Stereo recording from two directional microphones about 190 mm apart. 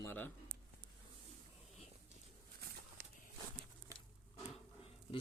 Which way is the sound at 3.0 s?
60° right (ahead or behind).